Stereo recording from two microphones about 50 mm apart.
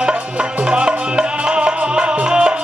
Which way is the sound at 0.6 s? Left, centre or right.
Right.